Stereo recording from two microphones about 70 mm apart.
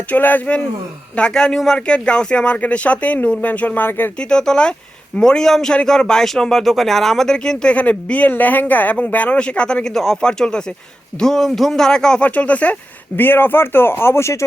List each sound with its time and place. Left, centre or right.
0.1 s speech: left
4.2 s speech: centre
12.2 s speech: left
13.1 s speech: left